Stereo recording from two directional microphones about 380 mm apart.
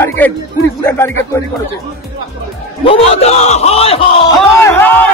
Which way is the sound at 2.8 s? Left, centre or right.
Centre.